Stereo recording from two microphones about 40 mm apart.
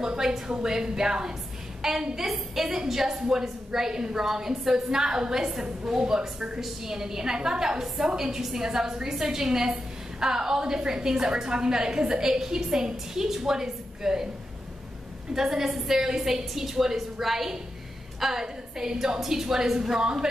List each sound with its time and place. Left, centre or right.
0.0 s a woman's voice: centre
15.3 s a woman's voice: centre